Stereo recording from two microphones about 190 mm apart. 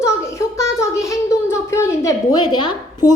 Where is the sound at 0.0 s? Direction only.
15° left (ahead or behind).